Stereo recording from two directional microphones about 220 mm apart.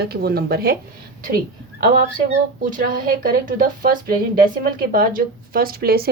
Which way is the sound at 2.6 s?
35° right (ahead or behind).